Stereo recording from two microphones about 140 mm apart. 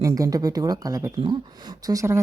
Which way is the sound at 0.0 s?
25° right (ahead or behind).